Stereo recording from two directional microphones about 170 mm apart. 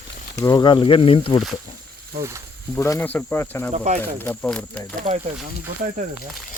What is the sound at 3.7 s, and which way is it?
Speech, 40° right (ahead or behind).